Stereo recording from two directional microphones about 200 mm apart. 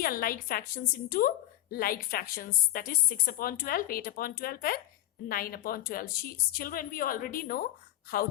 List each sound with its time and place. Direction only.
0.0 s a woman's voice: 45° left (ahead or behind)